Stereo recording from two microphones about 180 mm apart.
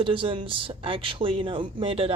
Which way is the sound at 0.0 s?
30° right (ahead or behind).